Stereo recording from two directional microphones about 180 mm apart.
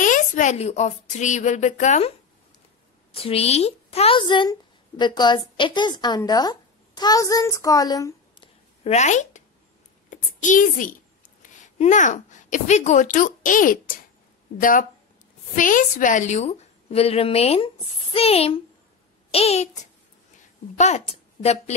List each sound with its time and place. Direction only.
0.0 s a woman's voice: 45° left (ahead or behind); by 8.5 s 20° left (ahead or behind)
8.8 s a child's voice: 40° left (ahead or behind)